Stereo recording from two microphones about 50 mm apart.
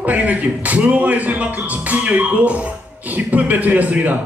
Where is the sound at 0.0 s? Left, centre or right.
Right.